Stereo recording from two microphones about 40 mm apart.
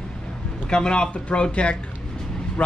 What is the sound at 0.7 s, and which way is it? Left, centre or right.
Speech, left.